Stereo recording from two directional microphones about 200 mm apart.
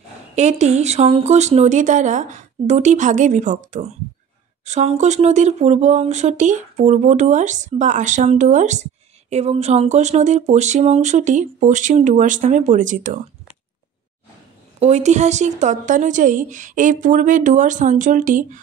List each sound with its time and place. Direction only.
0.4 s speech: 35° right (ahead or behind)
14.8 s speech: 35° right (ahead or behind)